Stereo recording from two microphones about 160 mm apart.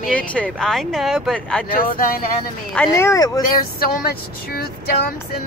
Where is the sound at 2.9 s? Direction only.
20° left (ahead or behind).